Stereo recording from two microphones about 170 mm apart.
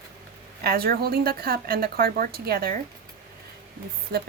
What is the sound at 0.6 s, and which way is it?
A woman's voice, 65° right (ahead or behind).